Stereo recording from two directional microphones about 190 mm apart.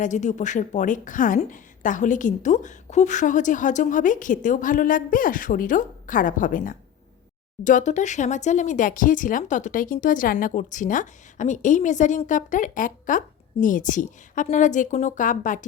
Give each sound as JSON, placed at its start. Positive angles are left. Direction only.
{"t": 0.0, "sound": "a woman's voice", "side_deg": 40}